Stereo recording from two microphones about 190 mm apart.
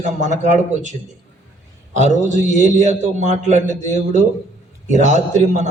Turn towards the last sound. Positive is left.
turn(degrees=-40)  # may be behind; listen again after turning